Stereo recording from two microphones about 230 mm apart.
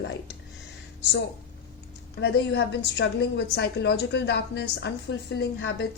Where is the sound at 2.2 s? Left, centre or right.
Left.